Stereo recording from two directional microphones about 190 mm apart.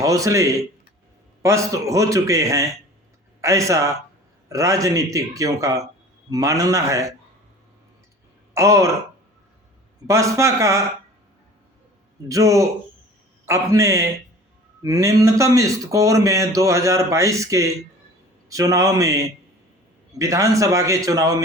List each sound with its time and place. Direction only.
0.0 s a man's voice: 15° right (ahead or behind)
8.5 s a man's voice: 15° right (ahead or behind)
10.1 s a man's voice: 15° right (ahead or behind)
12.3 s a man's voice: 15° right (ahead or behind)